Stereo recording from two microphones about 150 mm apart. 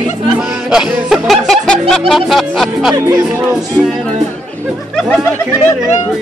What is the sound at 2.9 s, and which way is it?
Speech, 20° right (ahead or behind).